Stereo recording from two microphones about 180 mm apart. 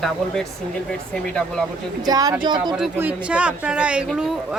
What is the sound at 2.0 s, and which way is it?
Speech, 20° right (ahead or behind).